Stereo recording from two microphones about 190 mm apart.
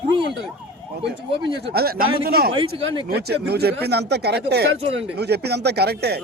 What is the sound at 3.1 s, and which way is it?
Speech, 60° right (ahead or behind).